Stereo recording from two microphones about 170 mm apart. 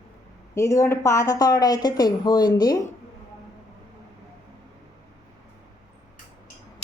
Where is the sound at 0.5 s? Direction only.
15° left (ahead or behind).